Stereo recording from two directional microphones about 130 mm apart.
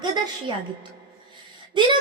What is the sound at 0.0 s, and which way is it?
Speech, 35° right (ahead or behind).